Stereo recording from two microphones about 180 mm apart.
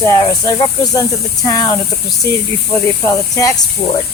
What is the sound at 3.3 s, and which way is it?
Speech, 15° left (ahead or behind).